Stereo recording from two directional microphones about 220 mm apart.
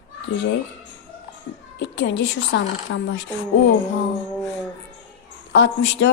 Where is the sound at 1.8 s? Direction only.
55° left (ahead or behind).